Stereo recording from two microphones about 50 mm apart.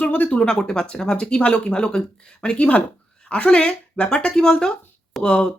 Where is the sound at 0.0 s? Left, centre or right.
Left.